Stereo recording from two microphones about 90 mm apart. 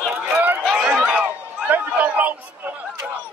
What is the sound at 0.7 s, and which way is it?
Run, 10° right (ahead or behind).